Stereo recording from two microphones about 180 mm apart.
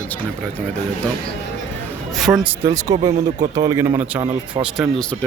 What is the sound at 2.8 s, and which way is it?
A man's voice, 20° right (ahead or behind).